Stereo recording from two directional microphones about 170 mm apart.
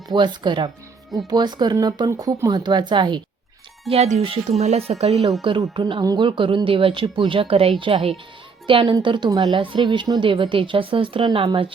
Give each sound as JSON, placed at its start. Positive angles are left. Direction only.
{"t": 0.1, "sound": "a woman's voice", "side_deg": -25}
{"t": 3.8, "sound": "a woman's voice", "side_deg": -40}